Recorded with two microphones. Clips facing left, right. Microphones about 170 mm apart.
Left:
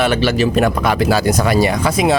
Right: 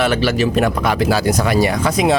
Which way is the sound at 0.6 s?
55° left (ahead or behind).